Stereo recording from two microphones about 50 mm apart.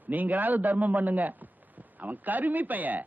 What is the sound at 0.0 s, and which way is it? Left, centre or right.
A man's voice, right.